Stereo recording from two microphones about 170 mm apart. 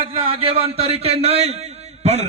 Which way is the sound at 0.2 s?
30° right (ahead or behind).